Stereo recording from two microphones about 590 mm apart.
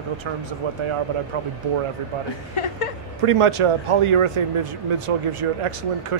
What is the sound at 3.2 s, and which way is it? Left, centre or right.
A man's voice, right.